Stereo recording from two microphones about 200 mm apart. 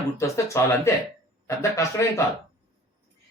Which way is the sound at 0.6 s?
15° left (ahead or behind).